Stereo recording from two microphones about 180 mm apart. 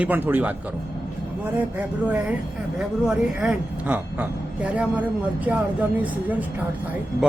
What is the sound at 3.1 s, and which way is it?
A woman's voice, 5° right (ahead or behind).